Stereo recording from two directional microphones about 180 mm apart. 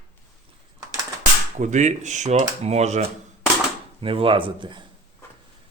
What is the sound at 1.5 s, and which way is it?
Speech, 40° right (ahead or behind).